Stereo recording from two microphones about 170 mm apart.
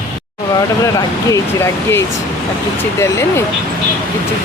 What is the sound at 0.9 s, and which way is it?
Speech, 20° left (ahead or behind).